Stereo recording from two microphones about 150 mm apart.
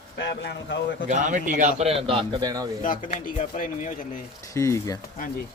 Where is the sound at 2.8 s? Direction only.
65° left (ahead or behind).